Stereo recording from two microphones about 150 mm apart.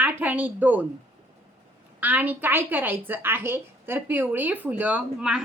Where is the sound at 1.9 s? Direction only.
10° right (ahead or behind).